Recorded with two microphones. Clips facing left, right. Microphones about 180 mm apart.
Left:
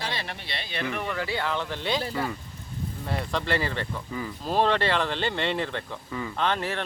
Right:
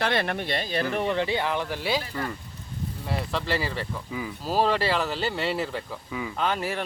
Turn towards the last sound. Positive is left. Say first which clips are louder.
# even
turn(degrees=-10)  # may be behind; listen again after turning